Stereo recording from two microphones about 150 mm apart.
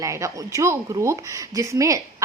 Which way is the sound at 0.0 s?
20° right (ahead or behind).